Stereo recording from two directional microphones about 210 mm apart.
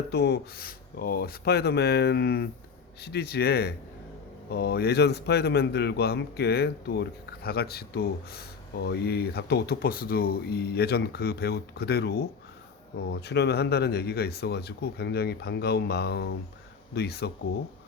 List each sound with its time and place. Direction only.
0.1 s a man's voice: 50° left (ahead or behind)